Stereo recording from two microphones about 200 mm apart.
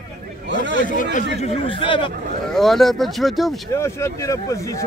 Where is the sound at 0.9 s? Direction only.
40° left (ahead or behind).